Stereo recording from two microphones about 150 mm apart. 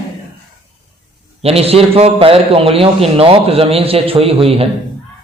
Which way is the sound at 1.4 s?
40° right (ahead or behind).